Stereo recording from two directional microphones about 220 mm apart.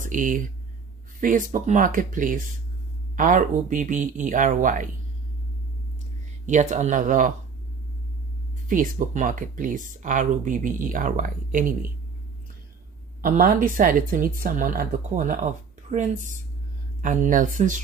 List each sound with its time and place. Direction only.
0.0 s speech: 35° right (ahead or behind)
6.4 s speech: 35° right (ahead or behind)
8.6 s speech: 40° right (ahead or behind)
13.2 s speech: 40° right (ahead or behind)